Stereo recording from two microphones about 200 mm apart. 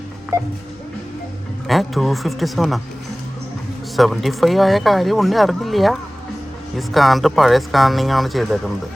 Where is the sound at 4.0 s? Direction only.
Centre (ahead or behind).